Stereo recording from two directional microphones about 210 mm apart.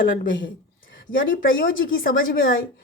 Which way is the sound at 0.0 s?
45° left (ahead or behind).